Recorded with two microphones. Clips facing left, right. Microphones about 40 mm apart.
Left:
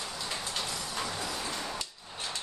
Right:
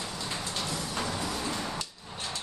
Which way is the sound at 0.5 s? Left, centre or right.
Centre.